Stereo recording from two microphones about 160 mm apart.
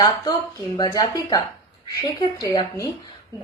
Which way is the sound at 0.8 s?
25° left (ahead or behind).